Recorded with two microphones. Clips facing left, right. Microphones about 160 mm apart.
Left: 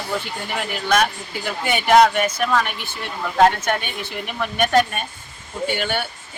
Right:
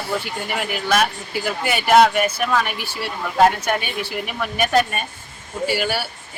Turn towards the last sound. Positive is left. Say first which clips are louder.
# right 1 dB
turn(degrees=-5)  # may be behind; listen again after turning